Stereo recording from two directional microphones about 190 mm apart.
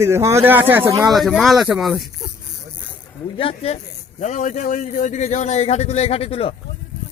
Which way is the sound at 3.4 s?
30° left (ahead or behind).